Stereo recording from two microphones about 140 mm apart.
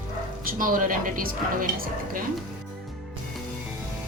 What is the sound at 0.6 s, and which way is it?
A woman's voice, 75° right (ahead or behind).